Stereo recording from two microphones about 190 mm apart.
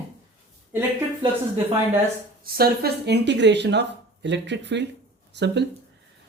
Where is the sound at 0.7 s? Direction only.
10° right (ahead or behind).